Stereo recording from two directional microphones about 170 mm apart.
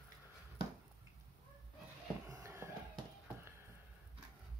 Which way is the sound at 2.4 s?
10° right (ahead or behind).